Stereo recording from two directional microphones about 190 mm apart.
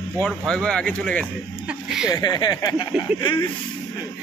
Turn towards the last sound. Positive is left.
turn(degrees=25)  # may be behind; listen again after turning